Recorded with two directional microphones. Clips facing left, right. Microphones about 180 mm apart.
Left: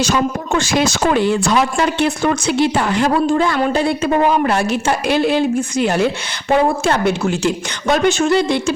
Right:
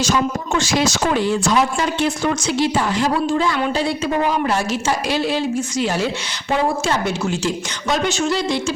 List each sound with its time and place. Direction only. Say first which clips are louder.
0.0 s speech: left 2 dB; 60° left (ahead or behind)